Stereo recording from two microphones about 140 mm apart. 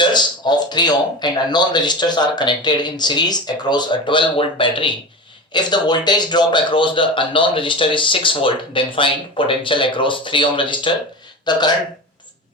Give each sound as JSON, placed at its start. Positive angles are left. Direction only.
{"t": 0.0, "sound": "speech", "side_deg": 30}